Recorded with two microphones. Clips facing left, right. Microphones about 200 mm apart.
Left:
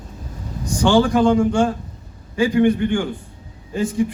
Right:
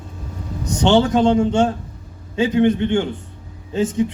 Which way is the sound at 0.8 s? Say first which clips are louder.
Even; 25° right (ahead or behind).